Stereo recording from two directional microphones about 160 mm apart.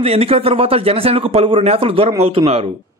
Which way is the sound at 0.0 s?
40° right (ahead or behind).